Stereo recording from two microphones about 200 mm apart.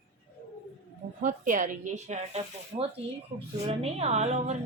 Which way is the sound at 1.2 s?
40° right (ahead or behind).